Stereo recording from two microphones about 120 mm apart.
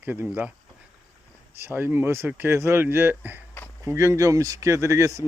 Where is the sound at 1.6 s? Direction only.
15° right (ahead or behind).